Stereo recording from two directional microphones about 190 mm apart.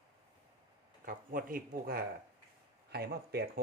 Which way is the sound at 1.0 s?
50° right (ahead or behind).